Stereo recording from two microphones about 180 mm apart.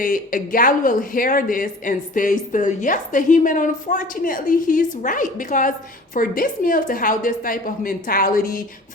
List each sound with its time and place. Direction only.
0.0 s speech: 50° left (ahead or behind)